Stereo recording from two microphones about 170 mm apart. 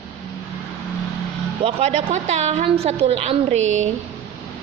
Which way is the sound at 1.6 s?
40° right (ahead or behind).